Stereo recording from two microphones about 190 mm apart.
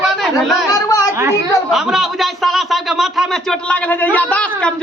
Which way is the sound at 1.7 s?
Centre (ahead or behind).